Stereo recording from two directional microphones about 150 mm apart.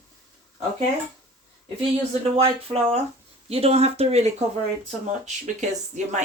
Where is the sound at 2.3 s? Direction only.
40° right (ahead or behind).